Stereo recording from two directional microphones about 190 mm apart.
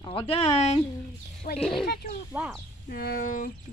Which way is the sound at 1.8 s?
55° left (ahead or behind).